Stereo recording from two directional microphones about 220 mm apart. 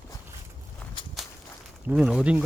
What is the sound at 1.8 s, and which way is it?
Speech, 5° right (ahead or behind).